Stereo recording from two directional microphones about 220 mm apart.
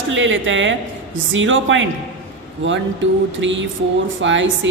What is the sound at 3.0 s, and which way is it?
A woman's voice, 60° right (ahead or behind).